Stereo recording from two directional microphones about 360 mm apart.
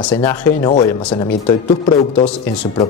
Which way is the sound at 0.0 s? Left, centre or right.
Centre.